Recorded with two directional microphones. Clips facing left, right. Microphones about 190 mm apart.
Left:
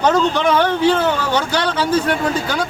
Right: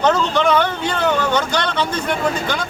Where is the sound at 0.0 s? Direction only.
10° left (ahead or behind).